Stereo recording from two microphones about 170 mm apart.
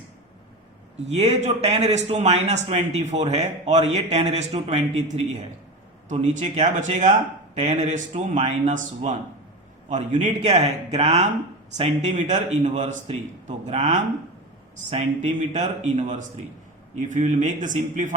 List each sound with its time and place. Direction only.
1.0 s a man's voice: 40° right (ahead or behind)